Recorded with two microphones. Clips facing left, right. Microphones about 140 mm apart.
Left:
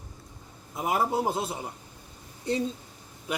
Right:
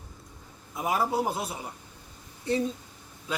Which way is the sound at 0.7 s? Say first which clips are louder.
Left 1 dB; 25° left (ahead or behind).